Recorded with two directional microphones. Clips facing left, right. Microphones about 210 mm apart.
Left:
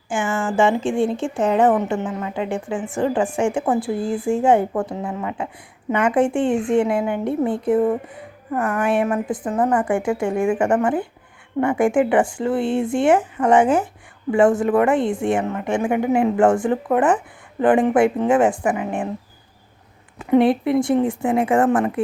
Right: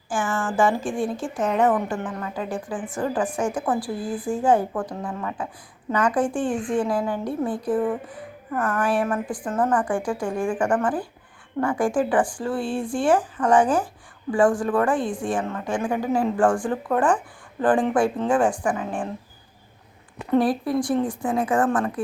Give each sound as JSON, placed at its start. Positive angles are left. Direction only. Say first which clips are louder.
{"t": 0.1, "sound": "a woman's voice", "louder": "left 3 dB", "side_deg": 25}
{"t": 20.3, "sound": "a woman's voice", "louder": "left 5 dB", "side_deg": 25}